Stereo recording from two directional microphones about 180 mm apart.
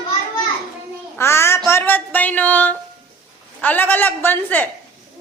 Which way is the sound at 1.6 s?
10° left (ahead or behind).